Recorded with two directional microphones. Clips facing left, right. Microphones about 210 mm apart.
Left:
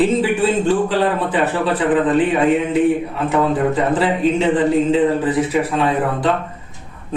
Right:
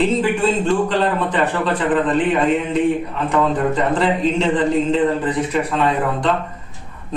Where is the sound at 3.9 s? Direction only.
5° left (ahead or behind).